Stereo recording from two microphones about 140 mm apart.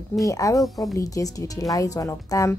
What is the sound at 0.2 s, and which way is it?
A woman's voice, 25° left (ahead or behind).